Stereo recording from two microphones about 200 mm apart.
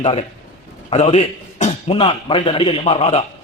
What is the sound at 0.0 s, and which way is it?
A man's voice, 30° left (ahead or behind).